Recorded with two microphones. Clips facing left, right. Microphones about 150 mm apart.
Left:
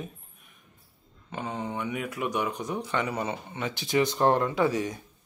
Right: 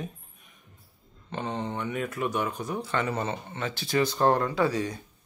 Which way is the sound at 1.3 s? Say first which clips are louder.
Right 1 dB; 10° left (ahead or behind).